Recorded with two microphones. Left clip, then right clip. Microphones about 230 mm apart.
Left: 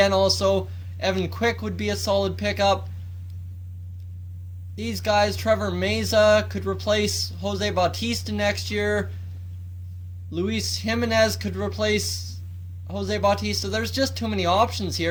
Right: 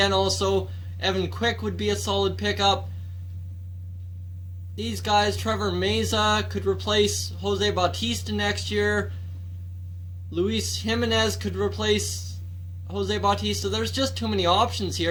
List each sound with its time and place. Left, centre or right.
0.0 s speech: left
4.7 s speech: left
10.3 s speech: left